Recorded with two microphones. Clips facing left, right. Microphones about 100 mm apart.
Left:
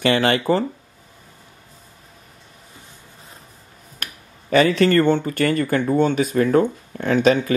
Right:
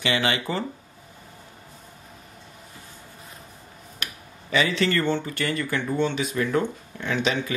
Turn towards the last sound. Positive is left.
turn(degrees=45)  # may be behind; listen again after turning